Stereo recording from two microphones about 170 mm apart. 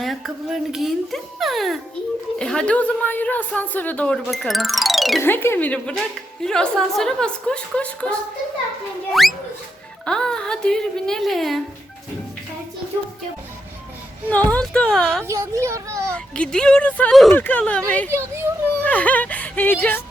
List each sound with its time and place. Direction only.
0.0 s a woman's voice: centre (ahead or behind)
5.2 s a woman's voice: 15° left (ahead or behind)
9.2 s speech: centre (ahead or behind)
14.5 s speech: 5° left (ahead or behind)
15.2 s a child's voice: 15° right (ahead or behind)
16.1 s a woman's voice: 5° left (ahead or behind)
18.1 s a child's voice: 15° right (ahead or behind)
18.8 s speech: 10° left (ahead or behind)